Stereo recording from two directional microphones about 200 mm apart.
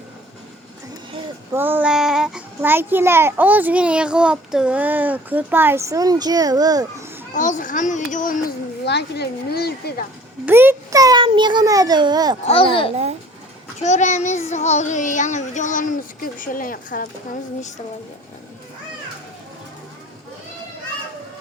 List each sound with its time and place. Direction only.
1.5 s a child's voice: 10° right (ahead or behind)
7.3 s speech: 40° left (ahead or behind)
10.4 s a child's voice: 10° right (ahead or behind)
12.5 s speech: 25° left (ahead or behind)
13.8 s child singing: 35° left (ahead or behind)